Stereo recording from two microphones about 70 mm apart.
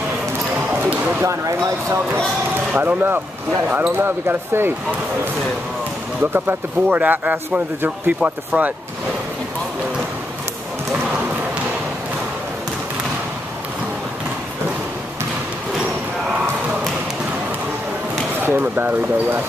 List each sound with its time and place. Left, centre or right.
0.7 s basketball bounce: centre
2.8 s a man's voice: right
6.3 s a man's voice: right
18.4 s a man's voice: right